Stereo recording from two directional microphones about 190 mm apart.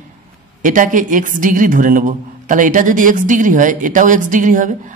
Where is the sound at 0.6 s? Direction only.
45° right (ahead or behind).